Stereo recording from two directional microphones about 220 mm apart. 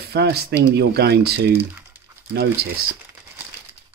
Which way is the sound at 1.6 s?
10° right (ahead or behind).